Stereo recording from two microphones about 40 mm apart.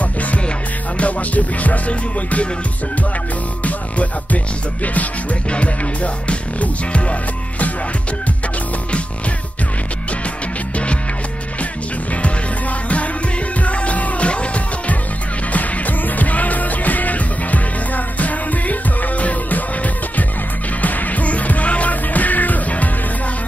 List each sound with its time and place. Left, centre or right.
0.9 s music: left
3.6 s music: left
6.2 s music: left
13.6 s music: left
16.2 s music: left